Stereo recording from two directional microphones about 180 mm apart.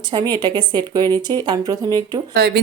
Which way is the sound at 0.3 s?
25° right (ahead or behind).